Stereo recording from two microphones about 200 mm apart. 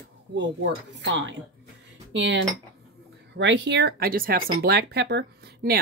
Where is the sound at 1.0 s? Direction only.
65° right (ahead or behind).